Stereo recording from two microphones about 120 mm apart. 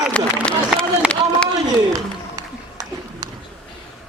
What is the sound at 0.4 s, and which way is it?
Run, 5° left (ahead or behind).